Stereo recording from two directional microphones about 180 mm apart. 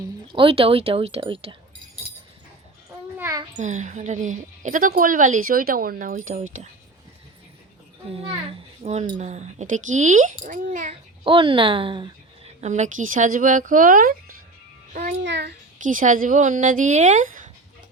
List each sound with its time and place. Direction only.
0.3 s speech: 30° right (ahead or behind)
3.2 s a sound: 15° right (ahead or behind)
3.6 s a woman's voice: 40° right (ahead or behind)
8.0 s a woman's voice: 30° right (ahead or behind)
11.3 s a woman's voice: 30° right (ahead or behind)
12.6 s a woman's voice: 40° right (ahead or behind)
15.2 s a child's voice: 70° right (ahead or behind)
15.8 s a woman's voice: 45° right (ahead or behind)